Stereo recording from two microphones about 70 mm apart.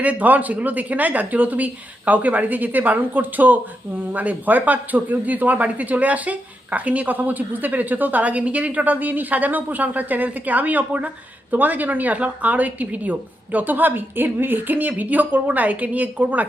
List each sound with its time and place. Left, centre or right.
0.0 s speech: right